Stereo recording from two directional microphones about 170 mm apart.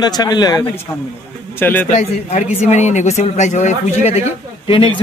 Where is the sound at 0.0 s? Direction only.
25° left (ahead or behind).